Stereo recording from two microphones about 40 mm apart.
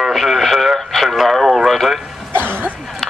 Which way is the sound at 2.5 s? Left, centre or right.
Left.